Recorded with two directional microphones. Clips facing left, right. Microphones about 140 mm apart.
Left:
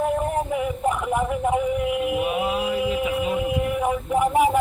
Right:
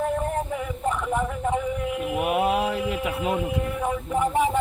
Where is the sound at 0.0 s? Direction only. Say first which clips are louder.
Left 3 dB; 10° left (ahead or behind).